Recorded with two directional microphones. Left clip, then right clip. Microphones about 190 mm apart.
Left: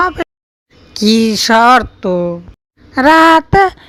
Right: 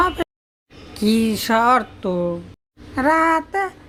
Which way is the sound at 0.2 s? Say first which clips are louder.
Left 5 dB; 25° left (ahead or behind).